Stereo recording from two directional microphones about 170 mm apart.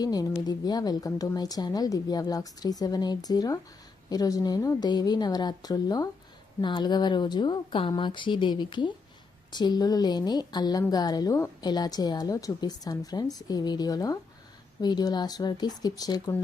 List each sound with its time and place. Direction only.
0.0 s a woman's voice: 20° left (ahead or behind)